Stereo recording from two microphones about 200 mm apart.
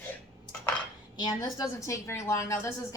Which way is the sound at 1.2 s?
20° left (ahead or behind).